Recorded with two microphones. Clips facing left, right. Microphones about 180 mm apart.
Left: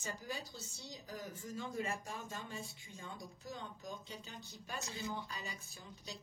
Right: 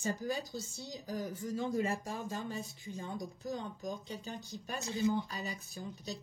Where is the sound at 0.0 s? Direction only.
40° right (ahead or behind).